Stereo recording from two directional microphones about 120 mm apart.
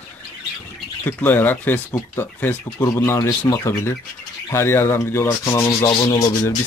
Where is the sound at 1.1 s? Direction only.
15° left (ahead or behind).